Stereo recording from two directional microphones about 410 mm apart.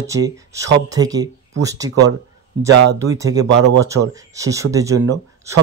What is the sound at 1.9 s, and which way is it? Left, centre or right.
Speech, right.